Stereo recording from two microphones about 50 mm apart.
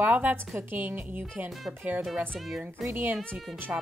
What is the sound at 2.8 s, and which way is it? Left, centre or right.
Speech, centre.